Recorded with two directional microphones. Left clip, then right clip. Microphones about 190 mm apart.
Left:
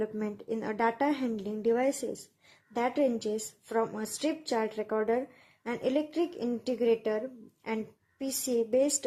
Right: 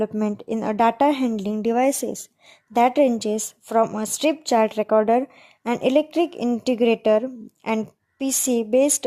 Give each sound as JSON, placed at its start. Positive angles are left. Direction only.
{"t": 0.0, "sound": "a woman's voice", "side_deg": -50}